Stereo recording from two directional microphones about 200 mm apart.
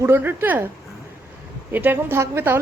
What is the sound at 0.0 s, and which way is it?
Speech, 10° right (ahead or behind).